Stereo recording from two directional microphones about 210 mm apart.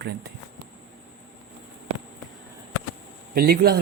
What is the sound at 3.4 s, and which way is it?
Speech, 45° right (ahead or behind).